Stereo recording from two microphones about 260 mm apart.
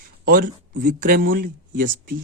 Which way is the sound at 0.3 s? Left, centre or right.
Right.